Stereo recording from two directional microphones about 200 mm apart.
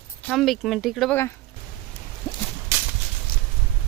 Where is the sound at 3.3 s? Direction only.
50° left (ahead or behind).